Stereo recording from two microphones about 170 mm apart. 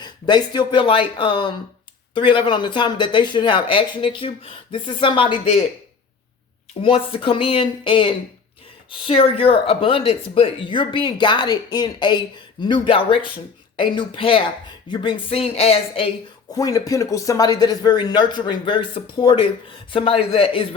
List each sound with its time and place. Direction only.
0.0 s speech: 25° left (ahead or behind)
6.8 s a woman's voice: 35° left (ahead or behind)
16.6 s a woman's voice: 20° left (ahead or behind)